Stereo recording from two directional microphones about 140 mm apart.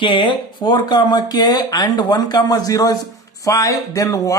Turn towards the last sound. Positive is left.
turn(degrees=25)  # may be behind; listen again after turning